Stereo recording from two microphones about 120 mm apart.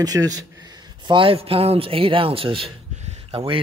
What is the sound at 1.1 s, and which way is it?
A man's voice, 50° right (ahead or behind).